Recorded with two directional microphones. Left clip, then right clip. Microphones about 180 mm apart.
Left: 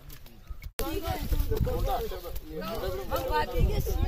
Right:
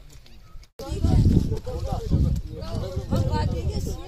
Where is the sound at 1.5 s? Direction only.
20° left (ahead or behind); by 4.1 s centre (ahead or behind).